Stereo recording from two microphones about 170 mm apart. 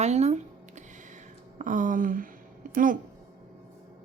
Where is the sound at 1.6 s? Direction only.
50° right (ahead or behind).